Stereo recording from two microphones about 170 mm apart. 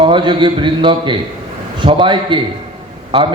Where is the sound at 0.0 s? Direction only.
30° right (ahead or behind).